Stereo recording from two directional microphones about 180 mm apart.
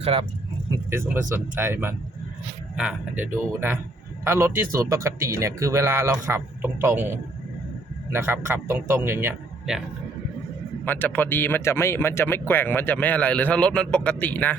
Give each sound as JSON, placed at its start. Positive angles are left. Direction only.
{"t": 0.0, "sound": "speech", "side_deg": -30}
{"t": 0.9, "sound": "speech", "side_deg": -15}
{"t": 8.1, "sound": "speech", "side_deg": -15}
{"t": 10.8, "sound": "speech", "side_deg": 10}